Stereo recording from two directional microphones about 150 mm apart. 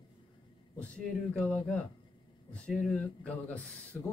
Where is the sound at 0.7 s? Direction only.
10° left (ahead or behind).